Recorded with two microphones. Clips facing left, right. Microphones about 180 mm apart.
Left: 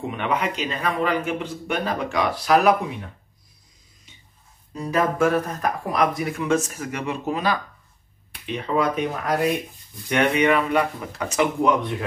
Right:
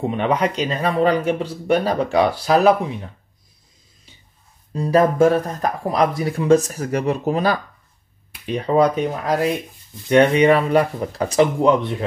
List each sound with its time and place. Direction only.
0.0 s speech: 35° right (ahead or behind)
4.7 s speech: 30° right (ahead or behind)